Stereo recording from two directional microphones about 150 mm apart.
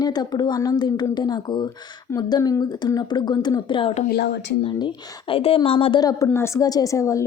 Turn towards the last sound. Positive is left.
turn(degrees=20)  # may be behind; listen again after turning